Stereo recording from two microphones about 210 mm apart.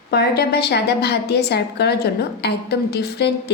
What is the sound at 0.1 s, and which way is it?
A woman's voice, 50° left (ahead or behind).